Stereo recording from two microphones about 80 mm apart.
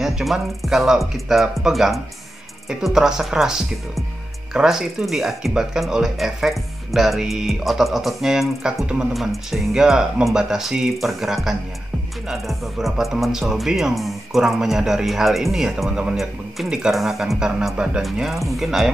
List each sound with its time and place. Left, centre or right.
0.0 s speech: centre
18.0 s speech: centre